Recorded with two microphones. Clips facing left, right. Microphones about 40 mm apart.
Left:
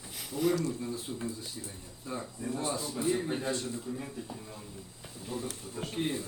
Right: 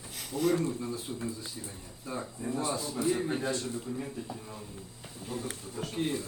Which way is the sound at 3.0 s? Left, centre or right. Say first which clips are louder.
Right 1 dB; left.